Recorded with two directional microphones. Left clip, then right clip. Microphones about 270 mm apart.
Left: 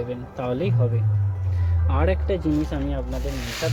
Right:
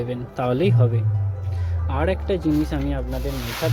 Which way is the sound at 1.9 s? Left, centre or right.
Centre.